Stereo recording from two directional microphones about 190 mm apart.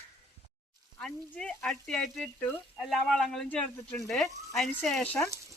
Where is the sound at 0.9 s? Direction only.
5° left (ahead or behind).